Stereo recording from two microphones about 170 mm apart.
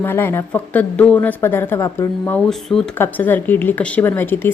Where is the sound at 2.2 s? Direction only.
5° left (ahead or behind).